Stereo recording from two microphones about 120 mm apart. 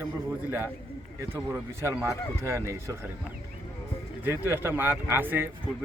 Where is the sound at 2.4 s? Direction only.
25° right (ahead or behind).